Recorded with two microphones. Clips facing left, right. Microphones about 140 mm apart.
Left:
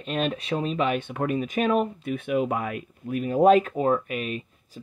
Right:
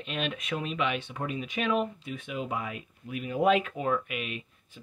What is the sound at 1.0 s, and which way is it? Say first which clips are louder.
Speech: left 8 dB; 55° left (ahead or behind).